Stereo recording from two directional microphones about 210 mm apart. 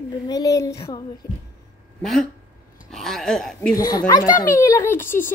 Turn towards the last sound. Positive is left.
turn(degrees=10)  # may be behind; listen again after turning